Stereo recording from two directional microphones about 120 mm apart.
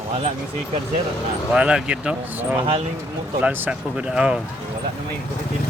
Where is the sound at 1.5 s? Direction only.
5° right (ahead or behind).